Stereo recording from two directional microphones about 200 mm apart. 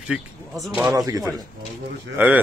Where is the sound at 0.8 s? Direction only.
15° right (ahead or behind).